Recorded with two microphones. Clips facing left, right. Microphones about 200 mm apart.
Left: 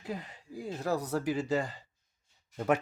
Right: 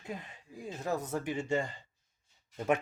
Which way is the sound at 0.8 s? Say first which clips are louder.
Left 2 dB; 35° left (ahead or behind).